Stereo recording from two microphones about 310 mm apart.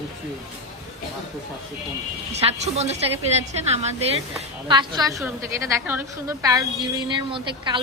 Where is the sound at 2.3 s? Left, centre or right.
Centre.